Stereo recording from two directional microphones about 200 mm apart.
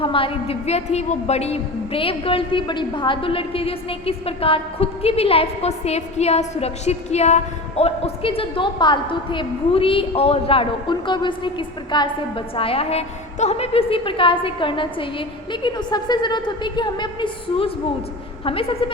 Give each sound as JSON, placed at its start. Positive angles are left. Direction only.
{"t": 0.0, "sound": "a woman's voice", "side_deg": 25}